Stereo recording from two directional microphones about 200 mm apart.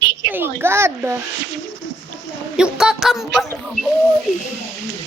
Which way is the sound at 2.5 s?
5° right (ahead or behind).